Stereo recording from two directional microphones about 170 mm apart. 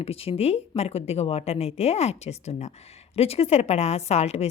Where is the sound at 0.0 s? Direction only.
35° left (ahead or behind).